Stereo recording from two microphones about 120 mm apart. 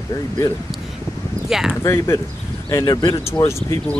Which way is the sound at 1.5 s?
5° right (ahead or behind).